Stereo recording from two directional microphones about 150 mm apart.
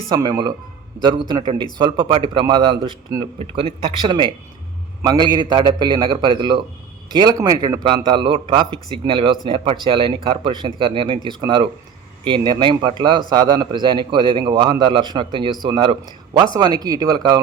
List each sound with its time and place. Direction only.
0.1 s a man's voice: 25° right (ahead or behind)